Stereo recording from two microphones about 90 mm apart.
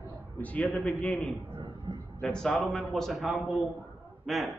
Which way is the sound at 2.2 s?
5° left (ahead or behind).